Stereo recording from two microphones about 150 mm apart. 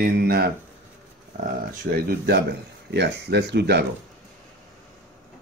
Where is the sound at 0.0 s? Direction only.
90° right.